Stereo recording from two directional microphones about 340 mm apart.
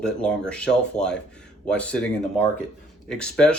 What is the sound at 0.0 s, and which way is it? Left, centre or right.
Speech, centre.